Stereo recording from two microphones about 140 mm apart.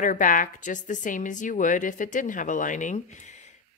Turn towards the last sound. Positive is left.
turn(degrees=60)  # may be behind; listen again after turning